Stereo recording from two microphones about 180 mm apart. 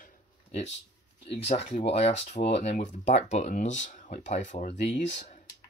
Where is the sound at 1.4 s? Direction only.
35° left (ahead or behind).